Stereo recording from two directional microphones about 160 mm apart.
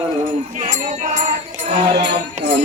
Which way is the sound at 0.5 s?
50° right (ahead or behind).